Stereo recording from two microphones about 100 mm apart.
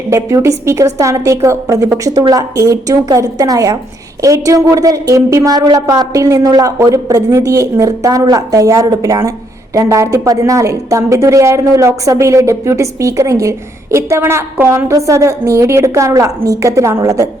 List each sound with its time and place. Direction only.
0.1 s a woman's voice: 30° right (ahead or behind)